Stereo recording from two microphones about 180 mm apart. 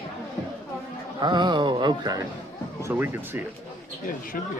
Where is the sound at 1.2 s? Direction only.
25° right (ahead or behind).